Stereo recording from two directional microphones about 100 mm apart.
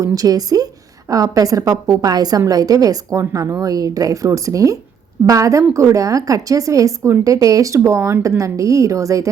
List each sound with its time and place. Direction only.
0.0 s speech: 40° right (ahead or behind)